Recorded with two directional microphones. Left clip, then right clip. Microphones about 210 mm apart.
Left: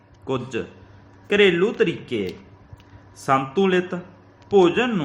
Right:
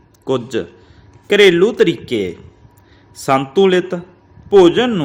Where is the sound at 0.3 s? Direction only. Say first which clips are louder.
Right 8 dB; 35° right (ahead or behind).